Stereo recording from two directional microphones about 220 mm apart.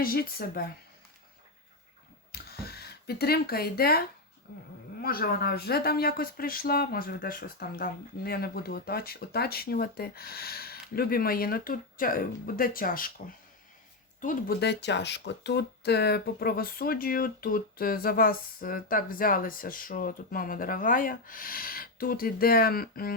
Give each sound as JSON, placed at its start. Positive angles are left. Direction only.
{"t": 0.0, "sound": "speech", "side_deg": 40}
{"t": 2.3, "sound": "a sound", "side_deg": 45}
{"t": 4.5, "sound": "speech", "side_deg": 40}